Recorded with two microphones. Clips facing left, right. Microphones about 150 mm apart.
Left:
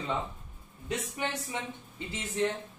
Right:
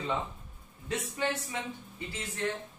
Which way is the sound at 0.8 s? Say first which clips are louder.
Right 2 dB; 20° left (ahead or behind).